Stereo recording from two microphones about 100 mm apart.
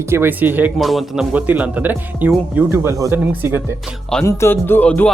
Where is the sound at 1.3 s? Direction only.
15° right (ahead or behind).